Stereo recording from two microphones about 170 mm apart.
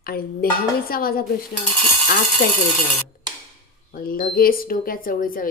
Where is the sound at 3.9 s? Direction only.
55° left (ahead or behind).